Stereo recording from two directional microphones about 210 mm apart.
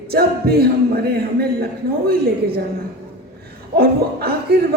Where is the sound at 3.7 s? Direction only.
50° right (ahead or behind).